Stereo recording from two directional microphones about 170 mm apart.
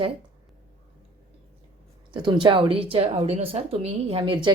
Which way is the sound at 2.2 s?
30° right (ahead or behind).